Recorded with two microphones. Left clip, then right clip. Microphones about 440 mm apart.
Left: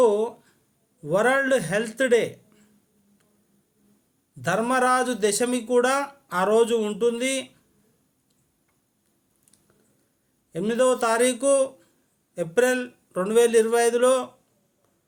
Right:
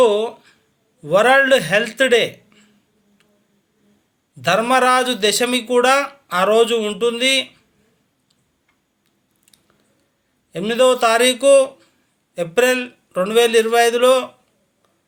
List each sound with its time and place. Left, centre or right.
0.0 s a sound: left
1.0 s a man's voice: left
4.4 s a man's voice: left
10.5 s a man's voice: left